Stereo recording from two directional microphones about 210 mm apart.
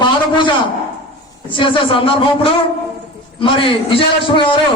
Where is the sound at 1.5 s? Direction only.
25° left (ahead or behind).